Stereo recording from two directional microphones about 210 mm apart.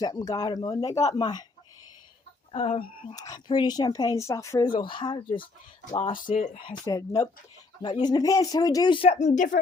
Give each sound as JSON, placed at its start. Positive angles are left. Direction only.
{"t": 0.0, "sound": "speech", "side_deg": 20}
{"t": 2.5, "sound": "a woman's voice", "side_deg": 25}